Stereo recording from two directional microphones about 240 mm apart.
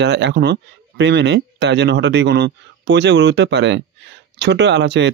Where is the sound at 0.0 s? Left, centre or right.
Right.